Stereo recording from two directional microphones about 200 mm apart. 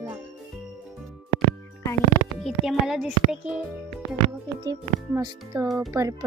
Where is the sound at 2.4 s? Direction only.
Centre (ahead or behind).